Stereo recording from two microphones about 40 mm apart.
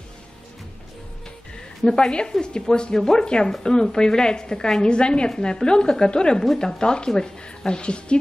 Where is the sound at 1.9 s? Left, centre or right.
Left.